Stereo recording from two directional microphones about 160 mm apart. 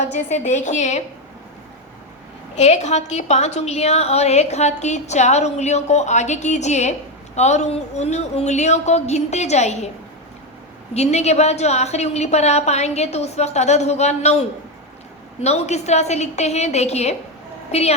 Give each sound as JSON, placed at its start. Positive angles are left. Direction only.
{"t": 0.0, "sound": "a woman's voice", "side_deg": 45}
{"t": 2.6, "sound": "a woman's voice", "side_deg": 45}
{"t": 10.9, "sound": "a woman's voice", "side_deg": 45}